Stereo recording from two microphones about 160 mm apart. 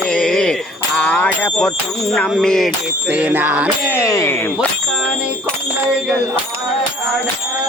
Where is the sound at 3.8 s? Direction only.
15° left (ahead or behind).